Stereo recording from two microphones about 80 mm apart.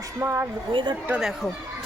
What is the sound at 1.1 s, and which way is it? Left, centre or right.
Speech, centre.